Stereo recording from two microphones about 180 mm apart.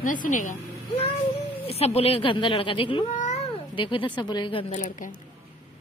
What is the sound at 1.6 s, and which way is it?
Speech, 35° left (ahead or behind).